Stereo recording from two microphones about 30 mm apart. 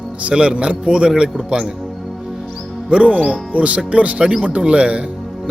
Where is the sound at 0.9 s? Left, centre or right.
Right.